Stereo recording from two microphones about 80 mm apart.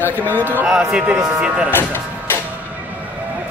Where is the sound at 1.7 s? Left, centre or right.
Left.